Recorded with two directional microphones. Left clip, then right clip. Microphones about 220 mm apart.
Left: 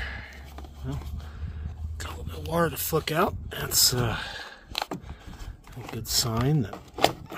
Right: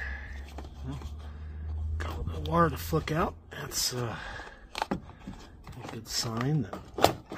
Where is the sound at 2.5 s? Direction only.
45° left (ahead or behind).